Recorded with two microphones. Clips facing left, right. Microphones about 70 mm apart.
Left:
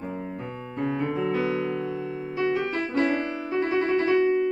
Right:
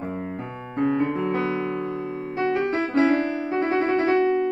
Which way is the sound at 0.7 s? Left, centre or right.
Right.